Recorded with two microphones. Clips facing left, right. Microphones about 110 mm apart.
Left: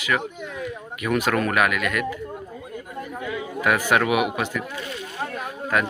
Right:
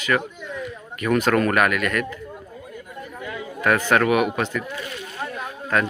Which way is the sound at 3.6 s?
10° left (ahead or behind).